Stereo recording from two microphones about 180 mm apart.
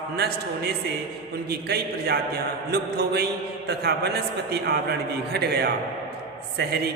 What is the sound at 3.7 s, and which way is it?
A man's voice, 65° right (ahead or behind).